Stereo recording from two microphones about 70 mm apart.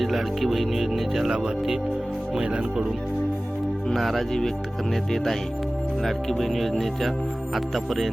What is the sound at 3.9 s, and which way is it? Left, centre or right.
Speech, centre.